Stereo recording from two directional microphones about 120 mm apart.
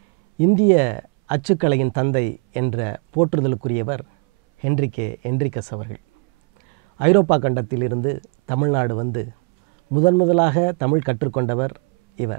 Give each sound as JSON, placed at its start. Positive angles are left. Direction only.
{"t": 0.4, "sound": "speech", "side_deg": -15}
{"t": 7.0, "sound": "speech", "side_deg": -15}